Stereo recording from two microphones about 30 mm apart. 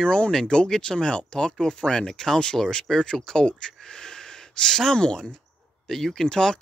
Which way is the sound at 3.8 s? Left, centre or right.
Left.